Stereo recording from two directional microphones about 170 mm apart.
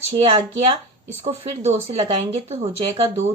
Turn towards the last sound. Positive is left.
turn(degrees=-40)  # may be behind; listen again after turning